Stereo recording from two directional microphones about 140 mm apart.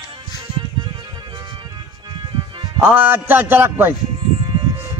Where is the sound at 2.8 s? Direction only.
10° right (ahead or behind).